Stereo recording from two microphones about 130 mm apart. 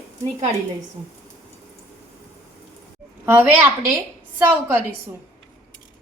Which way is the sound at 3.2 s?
15° right (ahead or behind).